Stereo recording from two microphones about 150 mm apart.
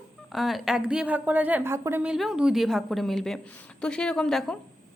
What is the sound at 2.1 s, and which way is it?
Speech, centre (ahead or behind).